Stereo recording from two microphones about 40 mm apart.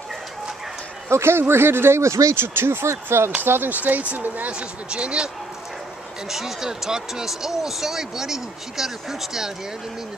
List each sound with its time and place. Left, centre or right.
1.0 s speech: right
3.4 s speech: right
4.5 s speech: right
6.2 s speech: centre